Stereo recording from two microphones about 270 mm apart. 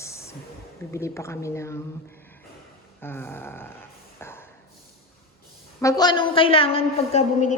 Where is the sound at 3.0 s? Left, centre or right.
Centre.